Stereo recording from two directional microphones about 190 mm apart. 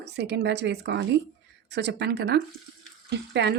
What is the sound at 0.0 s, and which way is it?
Speech, 65° right (ahead or behind).